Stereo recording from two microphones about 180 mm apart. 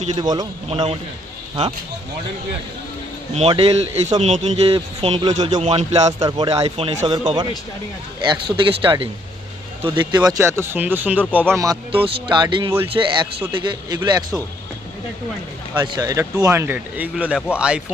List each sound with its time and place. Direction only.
0.1 s speech: 20° right (ahead or behind)
0.7 s speech: 35° right (ahead or behind)
3.3 s speech: 35° right (ahead or behind)
5.6 s speech: 35° right (ahead or behind)
6.1 s speech: 20° right (ahead or behind)
15.8 s speech: 20° right (ahead or behind)